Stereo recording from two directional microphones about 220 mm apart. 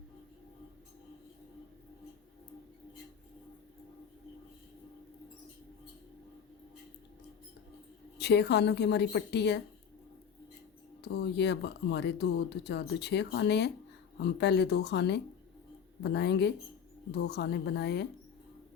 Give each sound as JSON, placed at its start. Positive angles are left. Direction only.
{"t": 8.2, "sound": "speech", "side_deg": 50}
{"t": 11.0, "sound": "speech", "side_deg": 50}